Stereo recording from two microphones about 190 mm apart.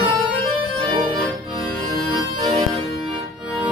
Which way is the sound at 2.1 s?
20° right (ahead or behind).